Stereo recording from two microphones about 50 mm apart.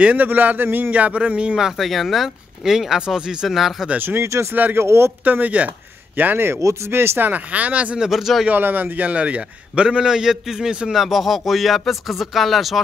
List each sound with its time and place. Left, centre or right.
0.0 s speech: right
0.9 s a man's voice: right
1.8 s speech: centre
4.2 s speech: right
5.2 s speech: right
7.2 s speech: right
8.0 s speech: centre
8.5 s a man's voice: right; by 10.9 s centre
10.9 s speech: centre